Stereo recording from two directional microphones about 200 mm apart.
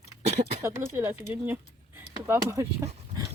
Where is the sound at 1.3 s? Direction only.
10° right (ahead or behind).